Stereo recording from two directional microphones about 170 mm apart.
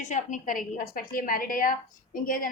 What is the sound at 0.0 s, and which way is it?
A woman's voice, 45° left (ahead or behind).